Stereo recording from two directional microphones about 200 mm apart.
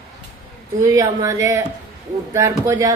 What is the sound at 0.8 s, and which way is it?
Speech, 15° right (ahead or behind).